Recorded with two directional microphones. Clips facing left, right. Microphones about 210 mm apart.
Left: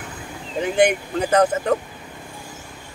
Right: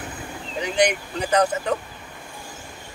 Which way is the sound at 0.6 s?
50° left (ahead or behind).